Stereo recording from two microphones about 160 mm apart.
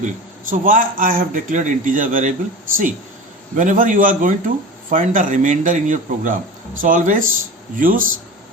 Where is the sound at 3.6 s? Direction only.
55° right (ahead or behind).